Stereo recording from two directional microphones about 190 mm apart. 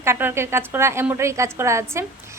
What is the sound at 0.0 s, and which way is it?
A woman's voice, 10° right (ahead or behind).